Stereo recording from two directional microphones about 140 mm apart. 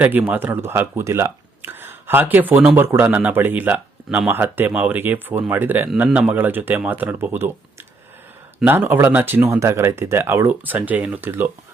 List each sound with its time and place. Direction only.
0.0 s speech: 10° right (ahead or behind)
8.6 s speech: 15° right (ahead or behind)